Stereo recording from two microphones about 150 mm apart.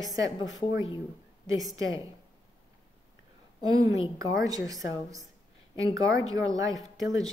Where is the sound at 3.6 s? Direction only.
25° right (ahead or behind).